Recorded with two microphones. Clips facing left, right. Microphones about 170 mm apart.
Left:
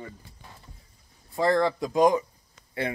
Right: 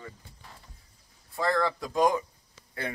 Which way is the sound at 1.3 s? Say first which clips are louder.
Left 4 dB; 20° left (ahead or behind).